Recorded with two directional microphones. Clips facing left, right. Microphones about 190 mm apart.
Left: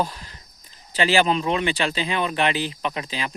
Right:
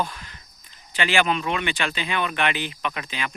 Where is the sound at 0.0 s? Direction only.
35° left (ahead or behind).